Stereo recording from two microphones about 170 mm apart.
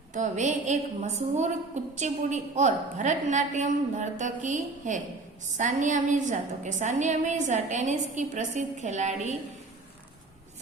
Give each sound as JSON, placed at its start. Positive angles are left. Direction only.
{"t": 0.1, "sound": "a woman's voice", "side_deg": -45}